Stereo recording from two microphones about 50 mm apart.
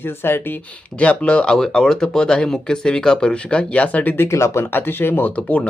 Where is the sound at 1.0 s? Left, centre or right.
Left.